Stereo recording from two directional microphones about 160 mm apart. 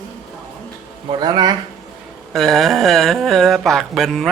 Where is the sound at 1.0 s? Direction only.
30° right (ahead or behind).